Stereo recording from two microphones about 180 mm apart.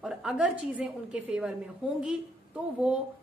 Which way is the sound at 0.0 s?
5° right (ahead or behind).